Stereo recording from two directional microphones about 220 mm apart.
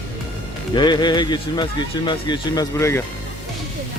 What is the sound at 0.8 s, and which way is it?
Speech, 20° left (ahead or behind).